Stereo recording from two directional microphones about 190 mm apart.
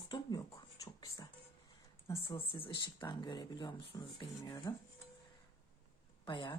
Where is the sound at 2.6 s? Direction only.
25° left (ahead or behind).